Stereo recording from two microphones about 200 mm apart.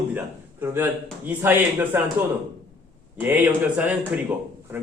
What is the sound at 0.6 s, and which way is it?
A man's voice, 10° right (ahead or behind).